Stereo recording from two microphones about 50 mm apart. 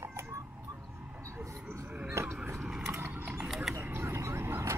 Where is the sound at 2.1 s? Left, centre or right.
Right.